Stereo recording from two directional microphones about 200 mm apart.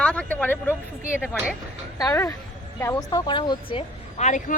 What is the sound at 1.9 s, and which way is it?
Speech, 15° left (ahead or behind).